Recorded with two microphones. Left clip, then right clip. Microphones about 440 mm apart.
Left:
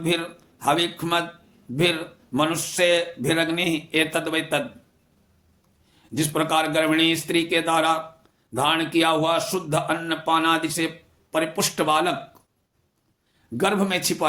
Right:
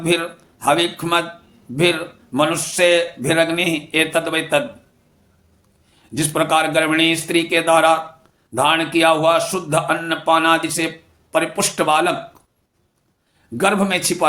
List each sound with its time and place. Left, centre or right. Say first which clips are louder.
0.0 s a man's voice: right 6 dB; left
6.0 s a man's voice: right 5 dB; left
13.6 s a man's voice: right 5 dB; left